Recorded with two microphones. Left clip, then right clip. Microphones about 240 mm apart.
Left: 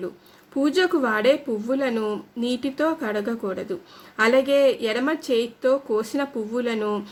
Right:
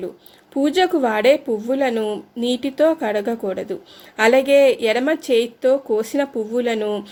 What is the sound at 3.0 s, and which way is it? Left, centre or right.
A woman's voice, centre.